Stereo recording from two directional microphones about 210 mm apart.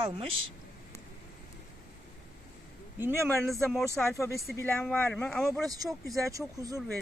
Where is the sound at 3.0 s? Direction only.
10° right (ahead or behind).